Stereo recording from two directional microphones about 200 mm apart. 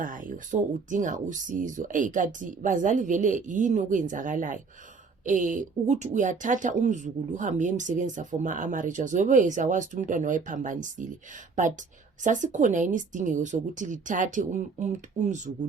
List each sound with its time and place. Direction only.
0.0 s speech: 40° right (ahead or behind)
12.2 s speech: 40° right (ahead or behind)